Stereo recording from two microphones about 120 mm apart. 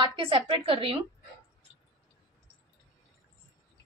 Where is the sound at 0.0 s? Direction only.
45° right (ahead or behind).